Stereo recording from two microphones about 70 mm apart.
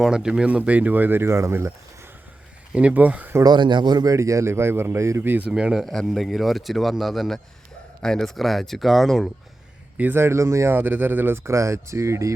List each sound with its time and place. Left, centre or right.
0.0 s speech: centre; by 2.0 s right
2.7 s speech: right
3.4 s speech: right
4.1 s a man's voice: right
5.5 s speech: centre
5.8 s speech: centre
10.0 s a man's voice: right
10.8 s speech: right
11.5 s speech: right